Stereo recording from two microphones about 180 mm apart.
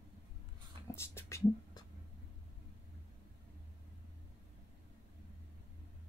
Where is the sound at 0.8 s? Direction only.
15° left (ahead or behind).